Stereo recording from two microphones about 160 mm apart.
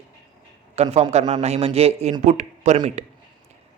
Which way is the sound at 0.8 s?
40° right (ahead or behind).